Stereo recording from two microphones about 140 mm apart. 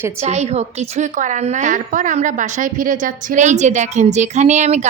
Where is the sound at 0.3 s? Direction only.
55° right (ahead or behind).